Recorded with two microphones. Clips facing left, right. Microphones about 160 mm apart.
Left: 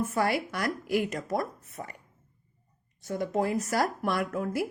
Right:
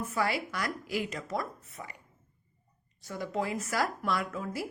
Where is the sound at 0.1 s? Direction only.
55° left (ahead or behind).